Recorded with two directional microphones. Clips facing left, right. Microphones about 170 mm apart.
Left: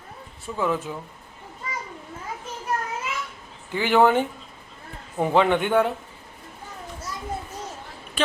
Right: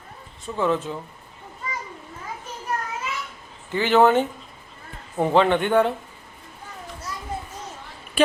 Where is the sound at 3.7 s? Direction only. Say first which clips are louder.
Right 1 dB; 15° left (ahead or behind).